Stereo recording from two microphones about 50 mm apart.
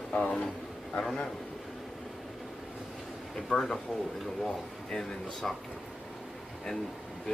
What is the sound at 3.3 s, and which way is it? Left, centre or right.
Speech, centre.